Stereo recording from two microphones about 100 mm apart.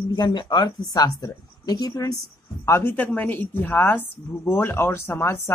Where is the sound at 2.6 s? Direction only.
25° left (ahead or behind).